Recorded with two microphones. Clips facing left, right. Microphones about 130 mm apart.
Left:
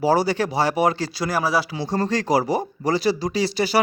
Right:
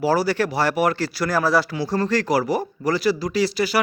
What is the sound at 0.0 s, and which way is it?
Speech, 25° left (ahead or behind).